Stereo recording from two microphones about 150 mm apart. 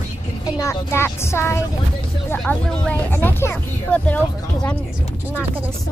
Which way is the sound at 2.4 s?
5° left (ahead or behind).